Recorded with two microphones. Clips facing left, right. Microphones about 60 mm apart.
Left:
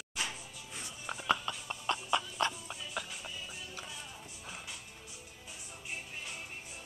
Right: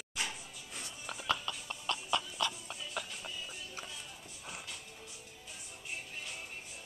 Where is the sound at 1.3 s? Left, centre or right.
Centre.